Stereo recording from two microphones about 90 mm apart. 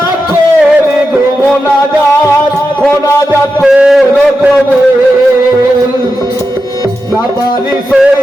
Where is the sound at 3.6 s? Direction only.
5° right (ahead or behind).